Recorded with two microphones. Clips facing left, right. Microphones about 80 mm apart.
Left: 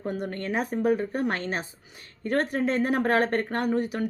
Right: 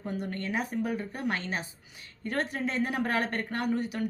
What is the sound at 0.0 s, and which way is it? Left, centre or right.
A woman's voice, left.